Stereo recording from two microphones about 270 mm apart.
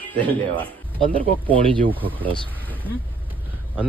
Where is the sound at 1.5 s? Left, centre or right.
Centre.